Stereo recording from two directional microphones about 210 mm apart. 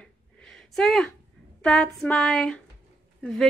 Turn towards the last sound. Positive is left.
turn(degrees=0)  # may be behind; listen again after turning